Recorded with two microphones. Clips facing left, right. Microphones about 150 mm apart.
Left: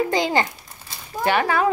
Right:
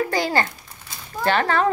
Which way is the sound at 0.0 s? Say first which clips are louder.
Left 1 dB; 20° left (ahead or behind).